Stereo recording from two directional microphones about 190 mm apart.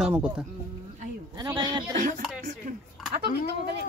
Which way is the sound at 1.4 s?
20° right (ahead or behind).